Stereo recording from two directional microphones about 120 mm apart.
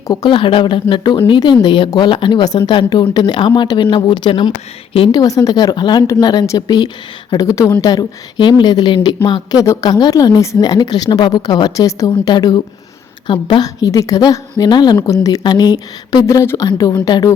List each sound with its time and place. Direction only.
0.1 s a woman's voice: 30° left (ahead or behind)
0.3 s a woman's voice: 45° left (ahead or behind)
5.1 s a woman's voice: 30° left (ahead or behind)
7.4 s a woman's voice: 25° left (ahead or behind); by 13.7 s 40° left (ahead or behind)
13.8 s a woman's voice: 30° left (ahead or behind)